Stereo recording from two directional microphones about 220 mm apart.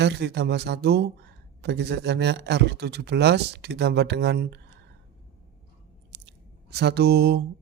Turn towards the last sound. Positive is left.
turn(degrees=-45)  # may be behind; listen again after turning